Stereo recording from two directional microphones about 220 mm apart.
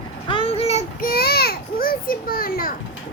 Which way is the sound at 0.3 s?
25° left (ahead or behind).